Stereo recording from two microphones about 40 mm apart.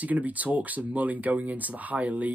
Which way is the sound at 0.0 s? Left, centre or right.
Right.